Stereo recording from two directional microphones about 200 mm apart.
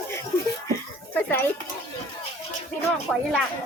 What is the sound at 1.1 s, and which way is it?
Speech, 10° left (ahead or behind).